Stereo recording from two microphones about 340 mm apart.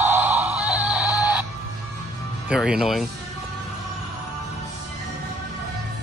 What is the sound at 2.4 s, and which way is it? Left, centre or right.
Speech, centre.